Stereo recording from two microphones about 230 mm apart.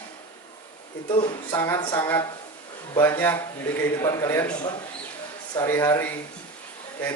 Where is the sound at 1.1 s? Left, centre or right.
Left.